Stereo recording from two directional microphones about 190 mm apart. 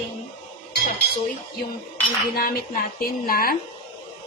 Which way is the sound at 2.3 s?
50° left (ahead or behind).